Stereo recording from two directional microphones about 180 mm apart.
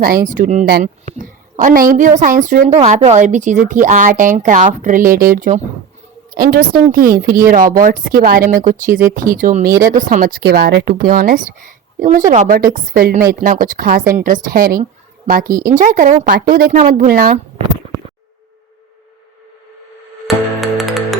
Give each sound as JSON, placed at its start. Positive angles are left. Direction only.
{"t": 0.3, "sound": "a woman's voice", "side_deg": -50}
{"t": 2.8, "sound": "speech", "side_deg": -35}
{"t": 10.5, "sound": "speech", "side_deg": -75}
{"t": 11.1, "sound": "speech", "side_deg": -50}
{"t": 16.7, "sound": "speech", "side_deg": -45}
{"t": 20.2, "sound": "music", "side_deg": 0}